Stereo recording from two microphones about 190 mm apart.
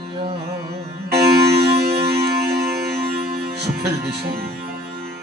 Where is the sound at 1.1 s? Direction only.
55° right (ahead or behind).